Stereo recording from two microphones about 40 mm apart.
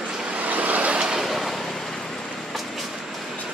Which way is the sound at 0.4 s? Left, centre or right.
Right.